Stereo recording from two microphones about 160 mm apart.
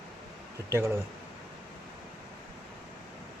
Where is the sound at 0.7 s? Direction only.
15° right (ahead or behind).